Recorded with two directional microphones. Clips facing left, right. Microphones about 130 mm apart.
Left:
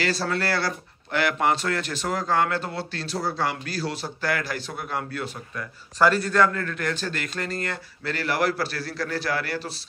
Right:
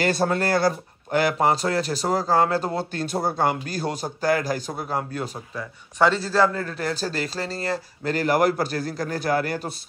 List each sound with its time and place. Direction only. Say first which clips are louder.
0.0 s speech: right 4 dB; 50° right (ahead or behind)
5.6 s a man's voice: right 1 dB; 20° right (ahead or behind); by 9.8 s 45° right (ahead or behind)